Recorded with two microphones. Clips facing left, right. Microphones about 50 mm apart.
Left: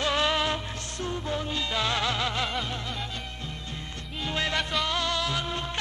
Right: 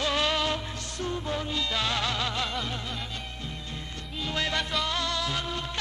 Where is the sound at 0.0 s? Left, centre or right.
Centre.